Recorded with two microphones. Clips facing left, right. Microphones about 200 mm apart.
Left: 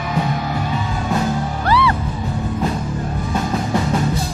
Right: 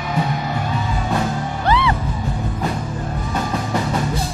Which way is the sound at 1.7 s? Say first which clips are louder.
Left 1 dB; 20° right (ahead or behind).